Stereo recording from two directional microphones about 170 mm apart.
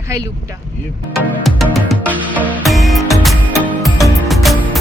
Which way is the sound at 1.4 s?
Centre (ahead or behind).